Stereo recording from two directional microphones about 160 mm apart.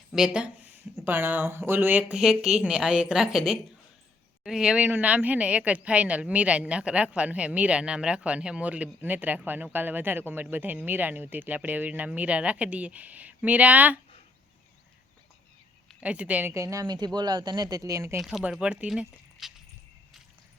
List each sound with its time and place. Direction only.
0.1 s speech: 5° right (ahead or behind)
15.9 s speech: 10° right (ahead or behind)
18.2 s speech: centre (ahead or behind)